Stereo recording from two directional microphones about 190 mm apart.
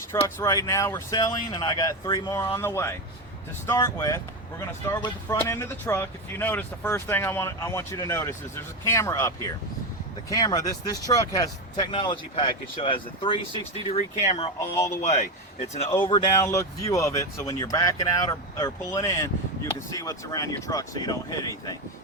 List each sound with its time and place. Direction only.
0.1 s speech: 15° left (ahead or behind); by 14.5 s 35° left (ahead or behind)
14.6 s speech: 15° left (ahead or behind)
15.0 s speech: 40° left (ahead or behind)
16.0 s speech: 20° left (ahead or behind)